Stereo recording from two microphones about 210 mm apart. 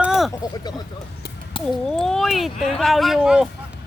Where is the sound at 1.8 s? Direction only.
Centre (ahead or behind).